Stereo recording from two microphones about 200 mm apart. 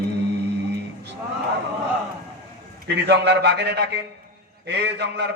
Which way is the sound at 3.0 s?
60° right (ahead or behind).